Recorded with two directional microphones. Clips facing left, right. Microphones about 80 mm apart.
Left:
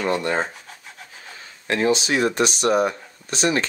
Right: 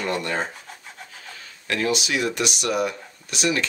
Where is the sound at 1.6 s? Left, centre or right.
Left.